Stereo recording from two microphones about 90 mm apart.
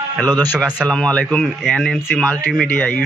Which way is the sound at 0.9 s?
10° left (ahead or behind).